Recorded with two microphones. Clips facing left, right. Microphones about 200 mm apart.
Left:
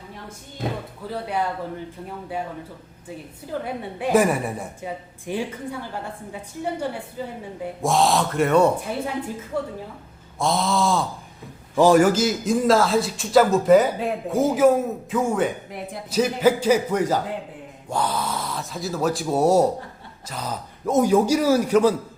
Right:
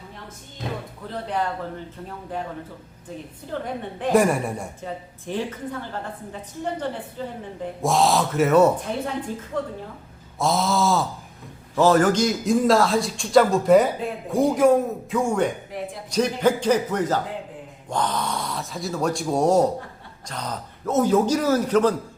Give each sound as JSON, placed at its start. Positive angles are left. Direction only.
{"t": 1.1, "sound": "a woman's voice", "side_deg": 10}
{"t": 3.6, "sound": "a woman's voice", "side_deg": 10}
{"t": 11.8, "sound": "a man's voice", "side_deg": 10}